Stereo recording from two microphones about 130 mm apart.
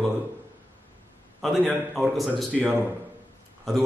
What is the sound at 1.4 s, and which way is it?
A man's voice, centre (ahead or behind).